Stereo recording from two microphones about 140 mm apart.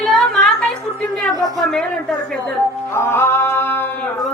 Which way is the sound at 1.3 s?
25° right (ahead or behind).